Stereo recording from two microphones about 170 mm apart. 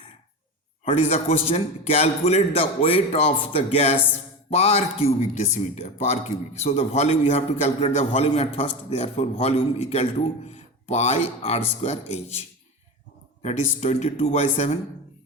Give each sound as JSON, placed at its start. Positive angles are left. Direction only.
{"t": 0.9, "sound": "speech", "side_deg": 40}